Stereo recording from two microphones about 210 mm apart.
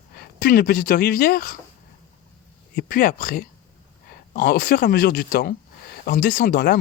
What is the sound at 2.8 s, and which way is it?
Speech, 40° left (ahead or behind).